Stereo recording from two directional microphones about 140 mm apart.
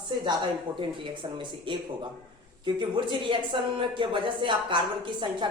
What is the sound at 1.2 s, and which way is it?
Speech, 35° right (ahead or behind).